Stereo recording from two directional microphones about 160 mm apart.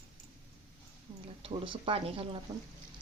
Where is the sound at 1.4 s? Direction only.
35° right (ahead or behind).